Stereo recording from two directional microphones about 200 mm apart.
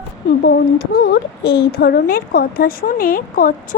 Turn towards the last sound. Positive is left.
turn(degrees=45)  # may be behind; listen again after turning